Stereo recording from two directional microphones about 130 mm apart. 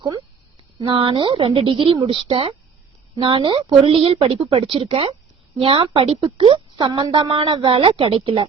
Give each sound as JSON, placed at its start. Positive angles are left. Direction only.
{"t": 0.8, "sound": "speech", "side_deg": -40}